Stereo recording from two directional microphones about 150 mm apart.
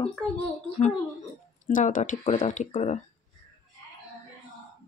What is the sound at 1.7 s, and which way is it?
A woman's voice, 60° left (ahead or behind).